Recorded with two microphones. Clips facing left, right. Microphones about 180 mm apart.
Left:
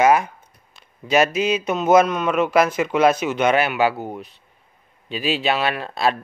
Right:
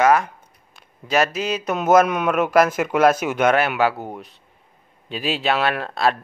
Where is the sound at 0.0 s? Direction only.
5° left (ahead or behind).